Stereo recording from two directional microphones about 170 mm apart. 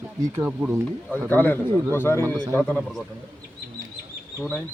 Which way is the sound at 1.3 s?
10° left (ahead or behind).